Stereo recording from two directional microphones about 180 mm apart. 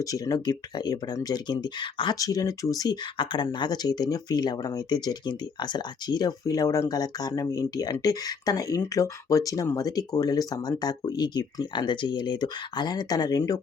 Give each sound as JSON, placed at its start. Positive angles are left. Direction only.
{"t": 0.0, "sound": "speech", "side_deg": 20}